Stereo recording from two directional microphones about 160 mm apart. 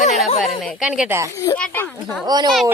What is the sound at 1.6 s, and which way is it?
Speech, 10° left (ahead or behind).